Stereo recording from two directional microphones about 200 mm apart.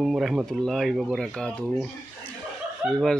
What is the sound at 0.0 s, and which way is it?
Speech, centre (ahead or behind).